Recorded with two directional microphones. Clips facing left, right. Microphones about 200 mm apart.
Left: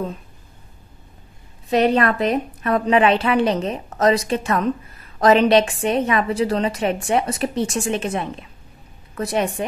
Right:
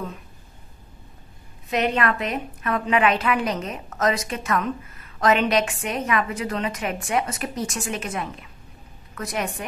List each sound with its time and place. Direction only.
1.7 s a woman's voice: 35° left (ahead or behind)